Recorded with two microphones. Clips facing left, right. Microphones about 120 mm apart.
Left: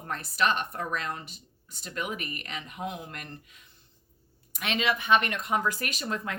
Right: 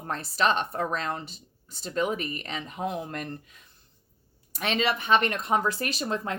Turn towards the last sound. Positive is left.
turn(degrees=-30)  # may be behind; listen again after turning